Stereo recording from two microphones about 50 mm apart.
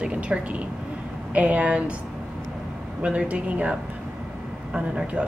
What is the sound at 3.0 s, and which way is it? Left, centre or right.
Speech, right.